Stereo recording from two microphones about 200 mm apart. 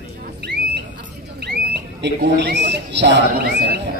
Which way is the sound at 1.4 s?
55° right (ahead or behind).